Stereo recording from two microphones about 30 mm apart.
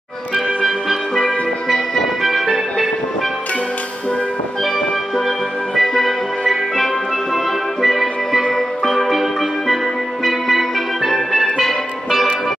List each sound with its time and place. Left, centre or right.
1.1 s music: centre
5.8 s music: centre